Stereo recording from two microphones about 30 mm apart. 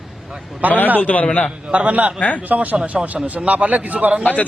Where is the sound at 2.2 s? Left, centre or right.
Left.